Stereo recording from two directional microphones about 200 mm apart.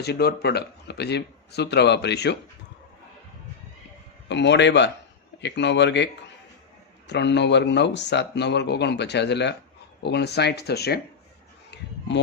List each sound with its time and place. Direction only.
0.0 s speech: 55° left (ahead or behind)
4.3 s speech: 60° left (ahead or behind)
7.1 s speech: 60° left (ahead or behind)
11.7 s a sound: 60° left (ahead or behind)